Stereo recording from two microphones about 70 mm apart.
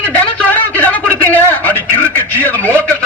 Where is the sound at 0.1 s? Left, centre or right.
Left.